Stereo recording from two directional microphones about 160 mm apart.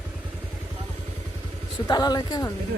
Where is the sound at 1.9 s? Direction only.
25° left (ahead or behind).